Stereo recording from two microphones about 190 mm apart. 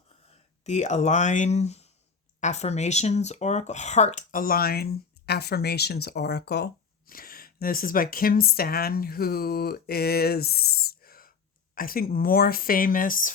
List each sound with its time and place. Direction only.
0.6 s speech: 35° left (ahead or behind)